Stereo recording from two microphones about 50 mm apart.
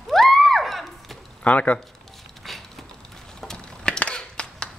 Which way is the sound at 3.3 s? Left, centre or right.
Centre.